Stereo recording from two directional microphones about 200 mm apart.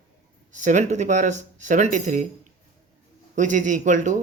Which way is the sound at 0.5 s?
35° right (ahead or behind).